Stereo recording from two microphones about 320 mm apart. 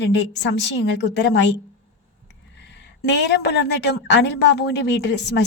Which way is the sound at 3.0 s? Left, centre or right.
Left.